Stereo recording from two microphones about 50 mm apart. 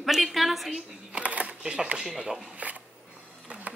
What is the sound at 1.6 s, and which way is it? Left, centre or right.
Speech, centre.